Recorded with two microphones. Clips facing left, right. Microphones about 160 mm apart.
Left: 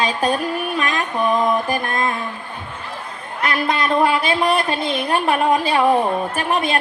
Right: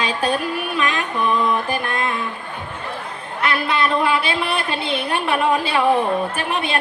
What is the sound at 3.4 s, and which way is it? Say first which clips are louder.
Speech: even; 40° left (ahead or behind).